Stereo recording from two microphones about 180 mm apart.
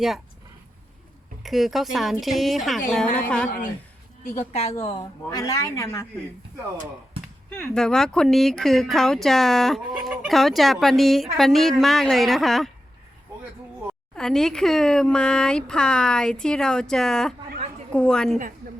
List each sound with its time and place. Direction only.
1.5 s speech: centre (ahead or behind)
4.4 s a woman's voice: 35° left (ahead or behind)
4.9 s speech: 20° left (ahead or behind)
7.5 s speech: 5° left (ahead or behind)
14.2 s speech: 5° left (ahead or behind)